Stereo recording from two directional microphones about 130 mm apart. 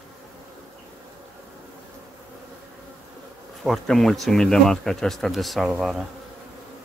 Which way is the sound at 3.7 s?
5° left (ahead or behind).